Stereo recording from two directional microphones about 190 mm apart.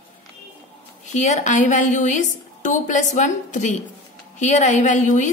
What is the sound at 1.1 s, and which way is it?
A woman's voice, 40° left (ahead or behind).